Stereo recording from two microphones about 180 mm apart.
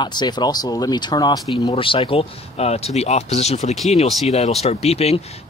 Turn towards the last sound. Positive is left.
turn(degrees=35)  # may be behind; listen again after turning